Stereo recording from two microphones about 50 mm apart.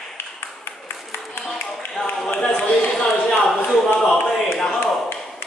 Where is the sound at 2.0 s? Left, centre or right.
Centre.